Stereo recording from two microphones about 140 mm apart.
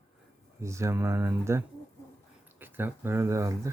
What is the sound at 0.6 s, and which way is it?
Speech, 20° right (ahead or behind).